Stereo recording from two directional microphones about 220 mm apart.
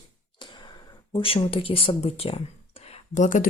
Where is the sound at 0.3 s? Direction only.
20° left (ahead or behind).